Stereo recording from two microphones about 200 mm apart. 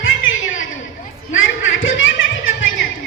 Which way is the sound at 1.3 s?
75° left (ahead or behind).